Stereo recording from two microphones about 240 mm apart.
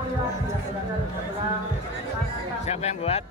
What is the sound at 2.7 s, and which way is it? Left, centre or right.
Speech, left.